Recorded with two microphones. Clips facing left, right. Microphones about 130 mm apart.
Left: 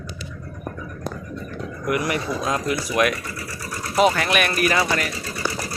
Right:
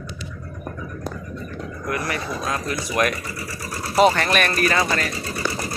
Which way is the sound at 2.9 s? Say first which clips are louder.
Right 1 dB; centre (ahead or behind).